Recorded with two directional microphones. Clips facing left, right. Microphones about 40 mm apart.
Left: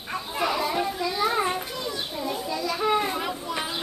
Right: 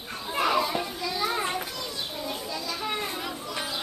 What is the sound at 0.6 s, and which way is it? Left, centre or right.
Child singing, centre.